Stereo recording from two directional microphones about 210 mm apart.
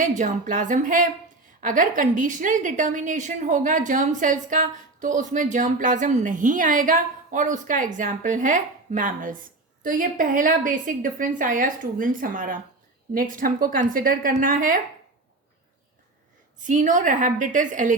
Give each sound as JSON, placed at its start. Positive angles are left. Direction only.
{"t": 0.2, "sound": "a woman's voice", "side_deg": -35}
{"t": 16.6, "sound": "a woman's voice", "side_deg": -35}